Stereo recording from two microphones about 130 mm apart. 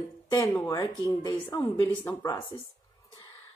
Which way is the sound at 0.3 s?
25° left (ahead or behind).